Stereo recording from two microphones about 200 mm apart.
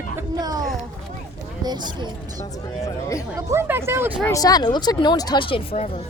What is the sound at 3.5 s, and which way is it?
Speech, 10° right (ahead or behind).